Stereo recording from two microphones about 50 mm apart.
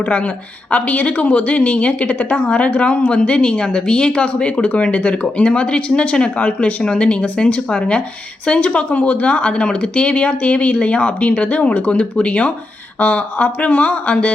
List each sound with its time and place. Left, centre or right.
0.0 s a woman's voice: left